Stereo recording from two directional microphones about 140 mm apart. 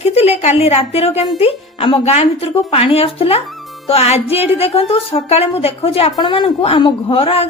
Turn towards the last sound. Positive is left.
turn(degrees=45)  # may be behind; listen again after turning